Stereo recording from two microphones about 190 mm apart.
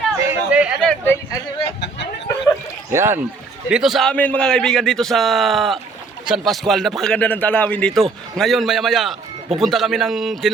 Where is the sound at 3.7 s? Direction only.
Centre (ahead or behind).